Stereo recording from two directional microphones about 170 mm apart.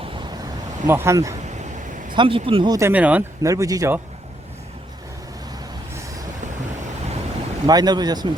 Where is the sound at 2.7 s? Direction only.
10° right (ahead or behind).